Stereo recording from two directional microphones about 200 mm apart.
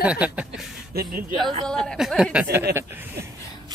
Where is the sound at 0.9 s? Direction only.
50° right (ahead or behind).